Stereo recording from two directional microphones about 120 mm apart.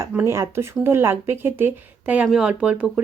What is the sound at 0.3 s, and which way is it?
Speech, 25° right (ahead or behind).